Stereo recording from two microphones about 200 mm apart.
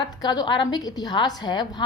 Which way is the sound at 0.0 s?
20° left (ahead or behind).